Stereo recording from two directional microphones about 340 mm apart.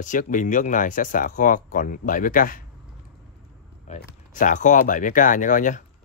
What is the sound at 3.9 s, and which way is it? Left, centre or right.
Speech, left.